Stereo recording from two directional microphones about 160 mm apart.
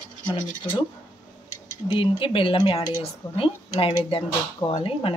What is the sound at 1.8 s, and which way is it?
Speech, 35° left (ahead or behind).